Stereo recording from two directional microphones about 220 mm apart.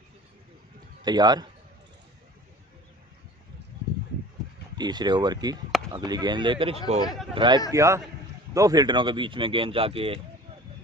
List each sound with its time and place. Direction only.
1.0 s speech: 20° right (ahead or behind)
4.7 s a man's voice: 20° right (ahead or behind)